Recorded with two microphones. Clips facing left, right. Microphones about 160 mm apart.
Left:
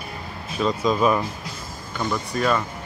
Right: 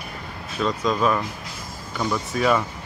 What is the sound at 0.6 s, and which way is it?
Speech, 10° left (ahead or behind).